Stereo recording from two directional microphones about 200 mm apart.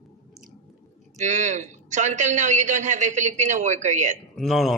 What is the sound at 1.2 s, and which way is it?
Speech, 35° right (ahead or behind).